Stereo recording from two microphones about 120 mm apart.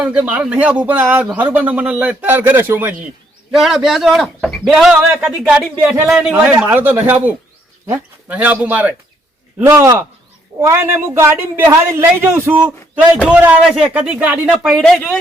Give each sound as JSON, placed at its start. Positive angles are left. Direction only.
{"t": 0.0, "sound": "a man's voice", "side_deg": -10}
{"t": 3.5, "sound": "speech", "side_deg": 0}
{"t": 6.7, "sound": "a man's voice", "side_deg": -15}